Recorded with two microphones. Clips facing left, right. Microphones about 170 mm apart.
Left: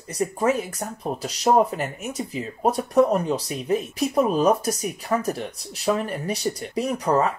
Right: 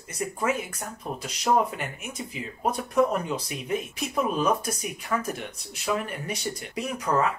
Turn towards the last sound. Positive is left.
turn(degrees=35)  # may be behind; listen again after turning